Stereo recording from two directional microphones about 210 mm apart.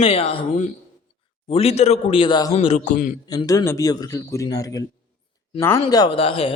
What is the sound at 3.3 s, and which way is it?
A man's voice, 15° left (ahead or behind).